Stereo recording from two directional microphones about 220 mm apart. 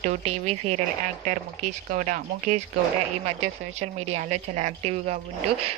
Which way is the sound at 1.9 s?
35° right (ahead or behind).